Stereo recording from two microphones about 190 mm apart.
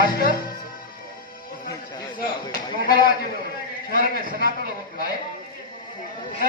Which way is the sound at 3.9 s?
50° left (ahead or behind).